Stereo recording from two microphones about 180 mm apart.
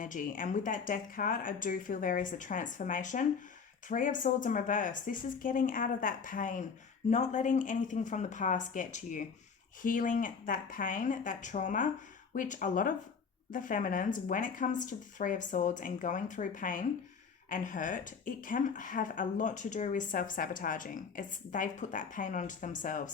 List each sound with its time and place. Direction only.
0.0 s speech: 45° left (ahead or behind)